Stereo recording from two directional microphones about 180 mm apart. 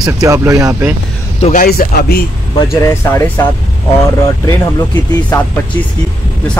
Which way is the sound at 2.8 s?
15° left (ahead or behind).